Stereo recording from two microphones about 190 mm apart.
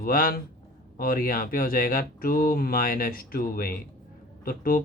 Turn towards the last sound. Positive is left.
turn(degrees=50)  # may be behind; listen again after turning